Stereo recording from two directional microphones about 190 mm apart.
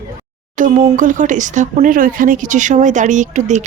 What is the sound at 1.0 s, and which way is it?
Speech, 45° right (ahead or behind).